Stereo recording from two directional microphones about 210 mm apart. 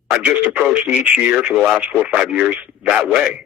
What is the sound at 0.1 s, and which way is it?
Speech, 10° right (ahead or behind).